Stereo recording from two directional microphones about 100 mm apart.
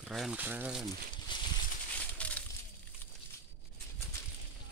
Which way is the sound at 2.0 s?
15° left (ahead or behind).